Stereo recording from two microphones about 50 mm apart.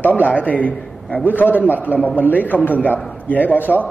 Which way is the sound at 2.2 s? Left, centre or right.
Left.